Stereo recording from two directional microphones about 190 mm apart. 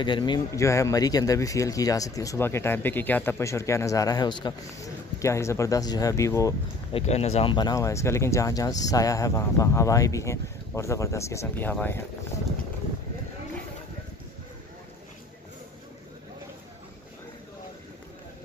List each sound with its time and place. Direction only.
0.0 s speech: 25° left (ahead or behind)
6.9 s speech: 35° left (ahead or behind); by 12.0 s 10° left (ahead or behind)